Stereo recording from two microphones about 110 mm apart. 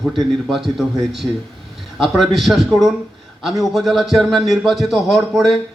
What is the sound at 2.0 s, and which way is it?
A man's voice, centre (ahead or behind).